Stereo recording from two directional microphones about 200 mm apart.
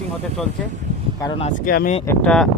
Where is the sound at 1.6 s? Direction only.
45° left (ahead or behind).